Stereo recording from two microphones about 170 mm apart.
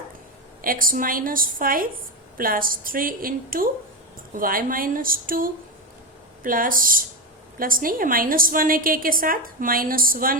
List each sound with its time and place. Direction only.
0.6 s a woman's voice: 55° right (ahead or behind)